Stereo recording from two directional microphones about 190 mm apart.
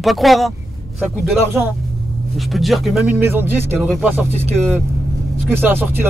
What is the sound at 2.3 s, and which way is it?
Speech, centre (ahead or behind).